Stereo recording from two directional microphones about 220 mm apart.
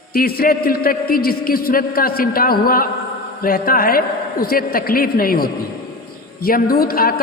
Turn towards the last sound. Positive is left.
turn(degrees=40)  # may be behind; listen again after turning